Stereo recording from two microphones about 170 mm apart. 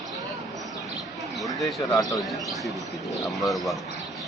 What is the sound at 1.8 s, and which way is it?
Speech, 20° left (ahead or behind).